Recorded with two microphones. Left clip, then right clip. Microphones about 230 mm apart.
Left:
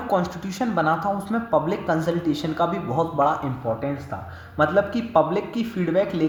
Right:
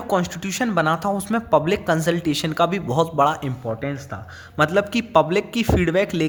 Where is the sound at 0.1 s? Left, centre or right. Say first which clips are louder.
Right 2 dB; right.